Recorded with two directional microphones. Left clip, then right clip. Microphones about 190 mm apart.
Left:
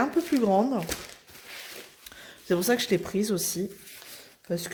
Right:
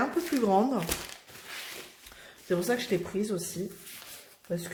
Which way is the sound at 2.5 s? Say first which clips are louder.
Left 4 dB; 50° left (ahead or behind).